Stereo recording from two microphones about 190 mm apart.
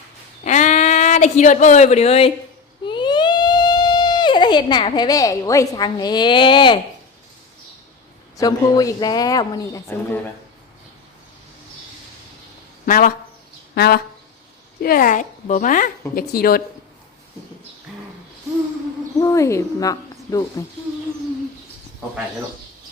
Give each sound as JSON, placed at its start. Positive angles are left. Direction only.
{"t": 0.4, "sound": "a sound", "side_deg": 40}
{"t": 8.4, "sound": "speech", "side_deg": 20}
{"t": 12.8, "sound": "speech", "side_deg": 50}
{"t": 13.7, "sound": "a sound", "side_deg": 55}
{"t": 14.8, "sound": "speech", "side_deg": 50}
{"t": 19.2, "sound": "speech", "side_deg": 15}